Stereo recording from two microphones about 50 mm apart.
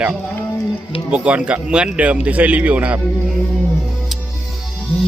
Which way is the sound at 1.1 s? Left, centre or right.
Right.